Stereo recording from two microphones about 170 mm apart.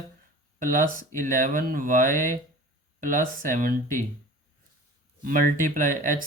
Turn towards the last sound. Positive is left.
turn(degrees=-50)  # may be behind; listen again after turning